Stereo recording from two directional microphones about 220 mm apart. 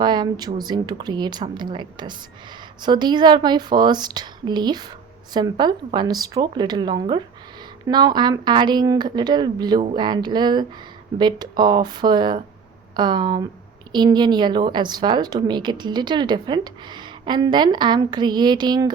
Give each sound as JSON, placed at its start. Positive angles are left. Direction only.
{"t": 0.0, "sound": "a woman's voice", "side_deg": -20}